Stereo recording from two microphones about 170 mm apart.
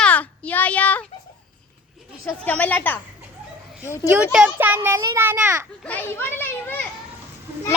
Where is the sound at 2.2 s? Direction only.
10° left (ahead or behind).